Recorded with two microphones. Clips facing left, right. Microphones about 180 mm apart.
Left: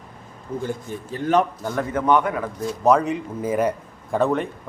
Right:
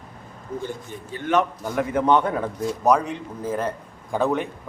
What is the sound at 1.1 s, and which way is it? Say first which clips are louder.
Speech: left 2 dB; 35° left (ahead or behind).